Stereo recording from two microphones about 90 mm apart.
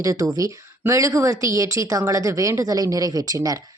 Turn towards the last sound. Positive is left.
turn(degrees=-40)  # may be behind; listen again after turning